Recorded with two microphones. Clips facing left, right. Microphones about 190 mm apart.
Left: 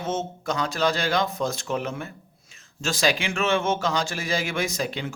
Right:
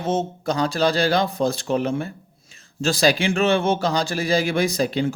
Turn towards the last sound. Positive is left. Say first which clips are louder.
# right 7 dB
turn(degrees=-35)  # may be behind; listen again after turning